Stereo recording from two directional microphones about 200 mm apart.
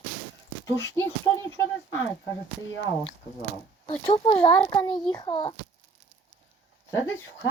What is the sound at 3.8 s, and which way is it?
A child's voice, 20° left (ahead or behind).